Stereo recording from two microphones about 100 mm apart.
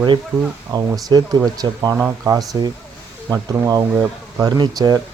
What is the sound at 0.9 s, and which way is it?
Speech, 45° right (ahead or behind).